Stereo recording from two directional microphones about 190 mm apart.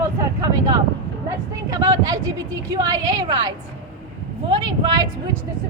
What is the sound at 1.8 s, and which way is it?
A woman's voice, 20° right (ahead or behind).